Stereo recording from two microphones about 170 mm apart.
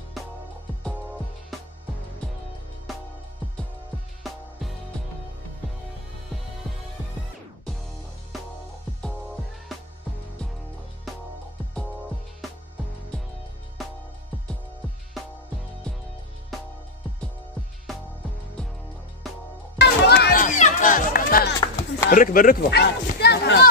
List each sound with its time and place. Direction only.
4.2 s music: centre (ahead or behind)
19.8 s music: 75° left (ahead or behind)
20.3 s music: 45° left (ahead or behind)
22.1 s speech: 55° left (ahead or behind); by 23.7 s 80° left